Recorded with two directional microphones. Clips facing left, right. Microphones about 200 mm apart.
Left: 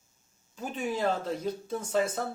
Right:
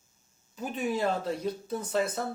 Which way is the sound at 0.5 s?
5° right (ahead or behind).